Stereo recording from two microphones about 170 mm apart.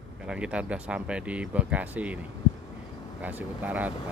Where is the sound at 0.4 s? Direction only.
5° right (ahead or behind).